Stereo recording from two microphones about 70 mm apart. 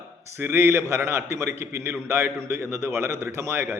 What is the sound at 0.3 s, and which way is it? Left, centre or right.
A man's voice, right.